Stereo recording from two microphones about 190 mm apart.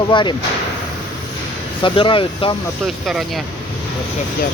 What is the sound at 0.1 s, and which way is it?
Speech, 25° left (ahead or behind).